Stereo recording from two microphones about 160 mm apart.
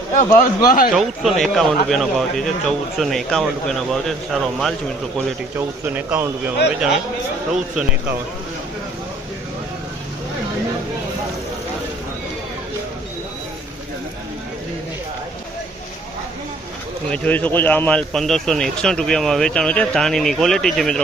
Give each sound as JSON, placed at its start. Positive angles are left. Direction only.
{"t": 0.1, "sound": "speech", "side_deg": 50}
{"t": 0.9, "sound": "a man's voice", "side_deg": 0}
{"t": 5.5, "sound": "speech", "side_deg": -10}
{"t": 17.1, "sound": "a man's voice", "side_deg": 10}